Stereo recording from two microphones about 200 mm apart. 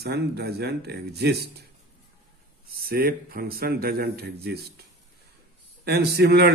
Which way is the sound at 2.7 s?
50° right (ahead or behind).